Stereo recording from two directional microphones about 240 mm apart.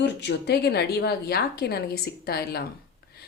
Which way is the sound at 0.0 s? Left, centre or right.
Left.